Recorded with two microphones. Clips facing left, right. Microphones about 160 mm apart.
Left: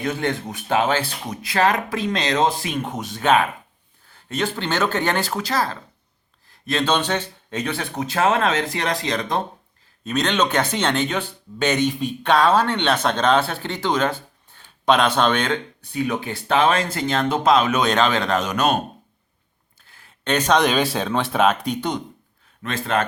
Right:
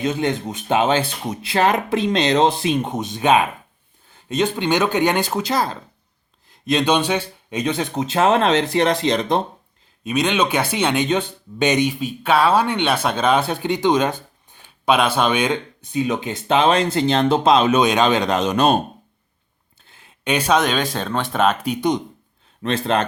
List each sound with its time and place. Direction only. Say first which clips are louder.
0.0 s speech: right 3 dB; 20° right (ahead or behind)
10.0 s speech: right 2 dB; 10° right (ahead or behind)
11.9 s speech: right 1 dB; 5° right (ahead or behind); by 17.8 s 25° right (ahead or behind)
17.8 s speech: right 2 dB; 15° right (ahead or behind)
19.8 s speech: right 3 dB; 20° right (ahead or behind)
22.6 s speech: right 3 dB; 30° right (ahead or behind)